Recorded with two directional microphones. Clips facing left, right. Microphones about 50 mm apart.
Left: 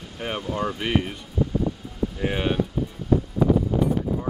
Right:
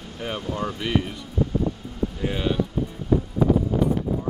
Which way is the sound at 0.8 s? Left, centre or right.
Left.